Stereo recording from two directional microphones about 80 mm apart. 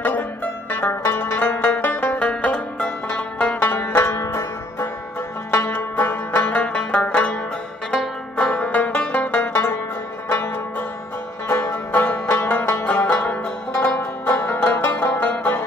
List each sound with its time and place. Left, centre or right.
0.0 s music: left